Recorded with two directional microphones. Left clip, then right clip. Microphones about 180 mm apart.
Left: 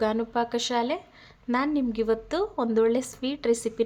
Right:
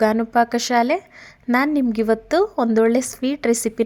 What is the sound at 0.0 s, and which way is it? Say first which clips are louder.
A woman's voice: right 9 dB; 40° right (ahead or behind).